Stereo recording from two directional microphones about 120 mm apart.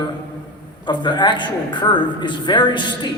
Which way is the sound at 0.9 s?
40° left (ahead or behind).